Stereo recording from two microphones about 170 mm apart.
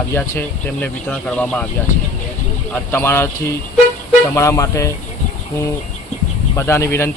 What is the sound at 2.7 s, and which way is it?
Speech, 15° left (ahead or behind).